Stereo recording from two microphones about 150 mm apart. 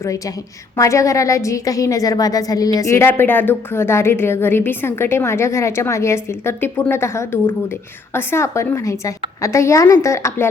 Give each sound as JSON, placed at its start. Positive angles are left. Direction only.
{"t": 0.8, "sound": "a woman's voice", "side_deg": 20}